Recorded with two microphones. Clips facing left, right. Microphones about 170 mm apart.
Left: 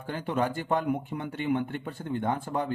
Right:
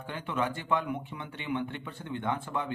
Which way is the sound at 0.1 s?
40° left (ahead or behind).